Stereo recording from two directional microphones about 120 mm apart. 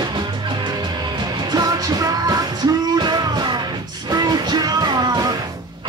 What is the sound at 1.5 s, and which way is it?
Music, 35° right (ahead or behind).